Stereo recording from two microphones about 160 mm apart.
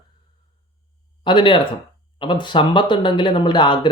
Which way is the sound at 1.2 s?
30° left (ahead or behind).